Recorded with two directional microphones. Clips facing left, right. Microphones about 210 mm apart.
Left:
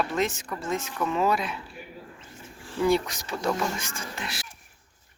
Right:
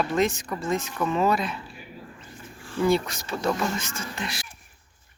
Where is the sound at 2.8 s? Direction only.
15° left (ahead or behind).